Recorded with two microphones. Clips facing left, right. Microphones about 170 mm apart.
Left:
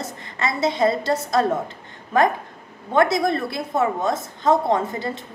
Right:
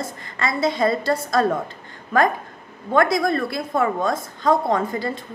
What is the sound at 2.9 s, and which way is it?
A woman's voice, 25° left (ahead or behind).